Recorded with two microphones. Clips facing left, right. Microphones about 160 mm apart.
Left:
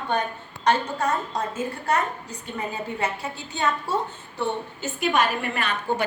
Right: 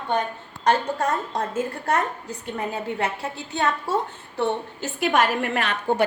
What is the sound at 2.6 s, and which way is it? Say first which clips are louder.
A woman's voice: right 2 dB; 60° right (ahead or behind).